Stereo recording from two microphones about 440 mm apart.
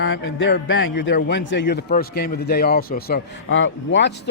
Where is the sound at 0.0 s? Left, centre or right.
Left.